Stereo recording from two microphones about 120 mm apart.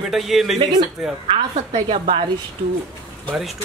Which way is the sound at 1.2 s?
50° right (ahead or behind).